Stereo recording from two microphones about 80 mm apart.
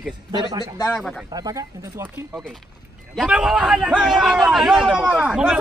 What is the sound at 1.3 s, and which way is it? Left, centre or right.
Speech, right.